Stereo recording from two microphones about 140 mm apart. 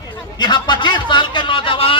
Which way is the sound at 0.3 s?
30° left (ahead or behind).